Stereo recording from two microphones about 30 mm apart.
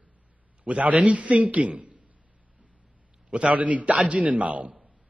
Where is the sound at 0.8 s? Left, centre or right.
Right.